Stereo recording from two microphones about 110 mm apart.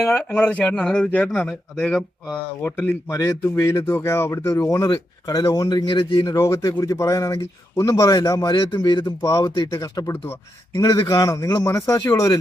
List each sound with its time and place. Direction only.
0.0 s speech: 10° left (ahead or behind)
2.6 s speech: 20° left (ahead or behind); by 6.1 s 50° left (ahead or behind)
6.2 s speech: 25° left (ahead or behind); by 9.0 s 40° left (ahead or behind)
9.0 s speech: 30° left (ahead or behind)